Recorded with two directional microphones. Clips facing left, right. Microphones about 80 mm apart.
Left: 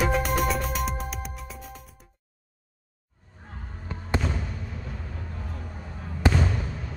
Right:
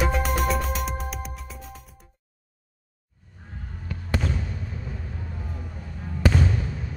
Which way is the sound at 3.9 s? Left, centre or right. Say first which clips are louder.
Even; left.